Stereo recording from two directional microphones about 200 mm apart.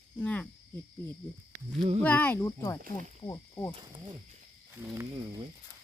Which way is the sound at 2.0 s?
10° left (ahead or behind).